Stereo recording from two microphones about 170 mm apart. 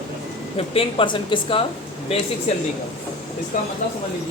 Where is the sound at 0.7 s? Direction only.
35° left (ahead or behind).